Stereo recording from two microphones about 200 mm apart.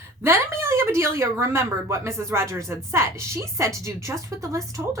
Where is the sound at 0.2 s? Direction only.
10° right (ahead or behind).